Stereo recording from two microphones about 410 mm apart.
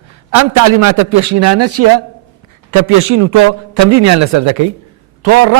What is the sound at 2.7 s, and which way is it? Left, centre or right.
A man's voice, right.